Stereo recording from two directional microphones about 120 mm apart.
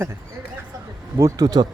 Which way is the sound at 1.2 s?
30° right (ahead or behind).